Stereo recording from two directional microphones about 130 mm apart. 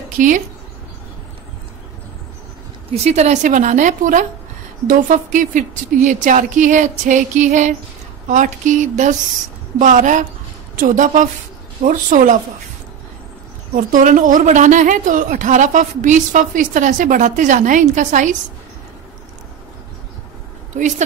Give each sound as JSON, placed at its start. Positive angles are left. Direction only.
{"t": 0.2, "sound": "a woman's voice", "side_deg": -90}
{"t": 2.9, "sound": "a woman's voice", "side_deg": -60}
{"t": 4.8, "sound": "a woman's voice", "side_deg": -90}
{"t": 9.8, "sound": "a woman's voice", "side_deg": -85}
{"t": 13.9, "sound": "a woman's voice", "side_deg": -90}